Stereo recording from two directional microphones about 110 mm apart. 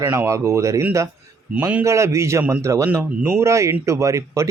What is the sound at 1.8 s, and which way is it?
Speech, 25° right (ahead or behind).